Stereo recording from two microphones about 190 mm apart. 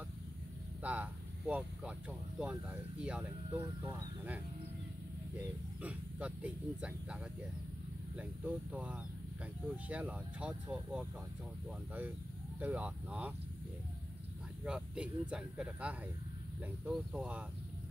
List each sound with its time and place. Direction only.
0.8 s speech: 5° right (ahead or behind)
3.6 s speech: 15° right (ahead or behind)
5.8 s speech: 5° right (ahead or behind)
8.2 s speech: 10° right (ahead or behind)
12.5 s speech: 10° right (ahead or behind)
14.6 s speech: 5° right (ahead or behind)